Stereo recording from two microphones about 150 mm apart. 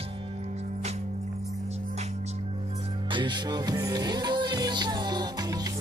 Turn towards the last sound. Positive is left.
turn(degrees=-25)  # may be behind; listen again after turning